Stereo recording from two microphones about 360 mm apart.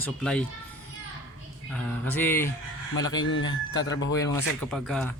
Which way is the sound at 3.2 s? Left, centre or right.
Left.